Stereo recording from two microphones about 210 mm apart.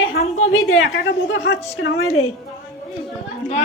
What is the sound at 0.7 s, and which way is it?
A woman's voice, 65° left (ahead or behind).